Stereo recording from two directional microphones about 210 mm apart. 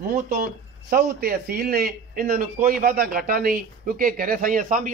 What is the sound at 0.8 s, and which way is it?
A man's voice, 50° right (ahead or behind).